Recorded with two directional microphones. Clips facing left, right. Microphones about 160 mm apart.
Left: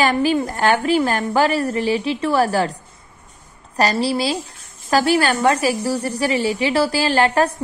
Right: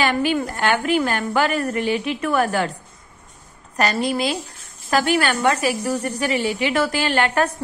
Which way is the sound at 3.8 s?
35° left (ahead or behind).